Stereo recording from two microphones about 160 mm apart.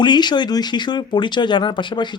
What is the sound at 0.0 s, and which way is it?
Speech, 25° left (ahead or behind).